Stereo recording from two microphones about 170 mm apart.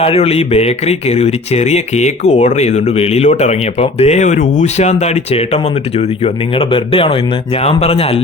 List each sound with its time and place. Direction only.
0.0 s speech: 35° left (ahead or behind)